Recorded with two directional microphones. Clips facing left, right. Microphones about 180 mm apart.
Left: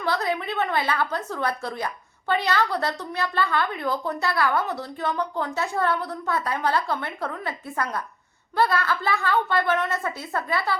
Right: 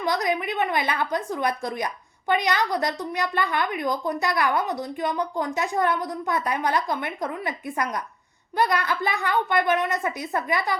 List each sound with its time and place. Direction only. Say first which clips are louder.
0.0 s a woman's voice: right 1 dB; 15° right (ahead or behind)